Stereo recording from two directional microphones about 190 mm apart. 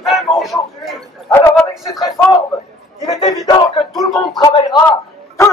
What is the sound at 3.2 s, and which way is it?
Speech, 30° left (ahead or behind).